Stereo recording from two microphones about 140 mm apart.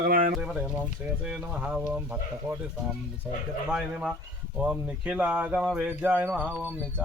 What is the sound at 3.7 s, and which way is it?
Speech, 5° right (ahead or behind).